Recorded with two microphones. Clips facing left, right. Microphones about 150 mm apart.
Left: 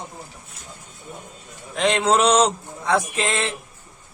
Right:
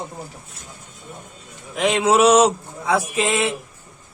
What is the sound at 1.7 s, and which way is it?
A man's voice, 5° right (ahead or behind).